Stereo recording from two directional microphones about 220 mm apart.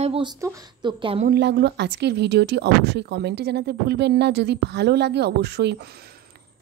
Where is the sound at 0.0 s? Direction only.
25° right (ahead or behind).